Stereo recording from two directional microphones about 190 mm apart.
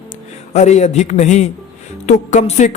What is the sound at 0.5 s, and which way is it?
A man's voice, 35° left (ahead or behind).